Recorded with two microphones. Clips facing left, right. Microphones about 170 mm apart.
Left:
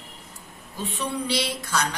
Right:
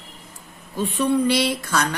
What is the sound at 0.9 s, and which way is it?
Speech, 55° right (ahead or behind).